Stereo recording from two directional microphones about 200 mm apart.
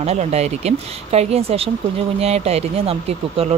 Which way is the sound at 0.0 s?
35° right (ahead or behind).